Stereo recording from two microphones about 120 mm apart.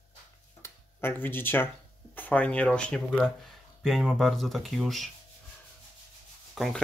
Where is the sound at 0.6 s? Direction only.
20° left (ahead or behind).